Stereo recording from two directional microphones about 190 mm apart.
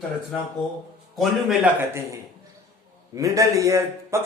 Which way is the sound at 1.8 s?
15° right (ahead or behind).